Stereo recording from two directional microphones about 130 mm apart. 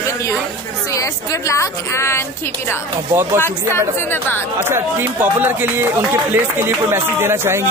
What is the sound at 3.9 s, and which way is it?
Speech, 15° left (ahead or behind).